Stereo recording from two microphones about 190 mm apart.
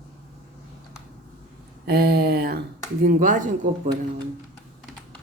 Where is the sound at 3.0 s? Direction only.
45° right (ahead or behind).